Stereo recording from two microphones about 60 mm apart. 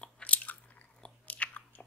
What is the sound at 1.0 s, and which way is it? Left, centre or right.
Chewing, left.